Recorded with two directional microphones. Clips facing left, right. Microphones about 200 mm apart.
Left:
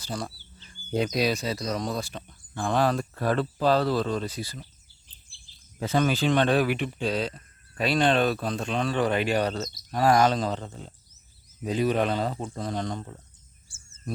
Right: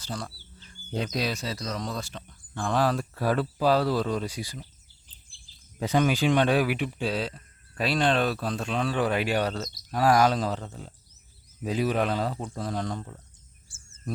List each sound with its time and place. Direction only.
0.0 s speech: 10° left (ahead or behind)
2.6 s speech: centre (ahead or behind)
5.9 s speech: 15° right (ahead or behind)
11.7 s speech: 5° right (ahead or behind)